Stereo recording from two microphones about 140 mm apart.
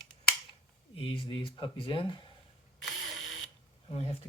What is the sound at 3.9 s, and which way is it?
Speech, 40° left (ahead or behind).